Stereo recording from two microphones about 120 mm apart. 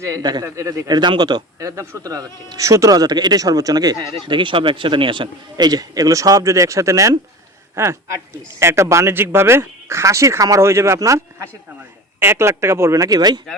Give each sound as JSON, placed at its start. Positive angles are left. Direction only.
{"t": 0.0, "sound": "speech", "side_deg": -30}
{"t": 1.5, "sound": "speech", "side_deg": -25}